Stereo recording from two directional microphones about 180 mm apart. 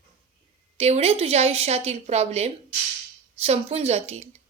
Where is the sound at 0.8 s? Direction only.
35° right (ahead or behind).